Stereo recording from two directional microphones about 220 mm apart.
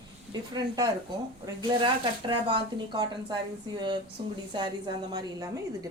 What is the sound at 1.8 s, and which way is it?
Speech, 20° right (ahead or behind).